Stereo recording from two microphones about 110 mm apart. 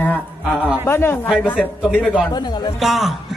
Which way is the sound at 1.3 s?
5° right (ahead or behind).